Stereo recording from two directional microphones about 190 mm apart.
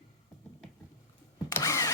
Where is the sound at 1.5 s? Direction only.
15° left (ahead or behind).